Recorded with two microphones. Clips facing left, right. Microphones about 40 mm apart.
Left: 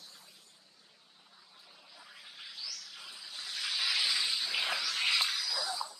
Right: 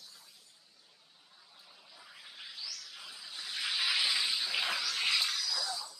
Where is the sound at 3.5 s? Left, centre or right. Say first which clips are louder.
Right 1 dB; centre.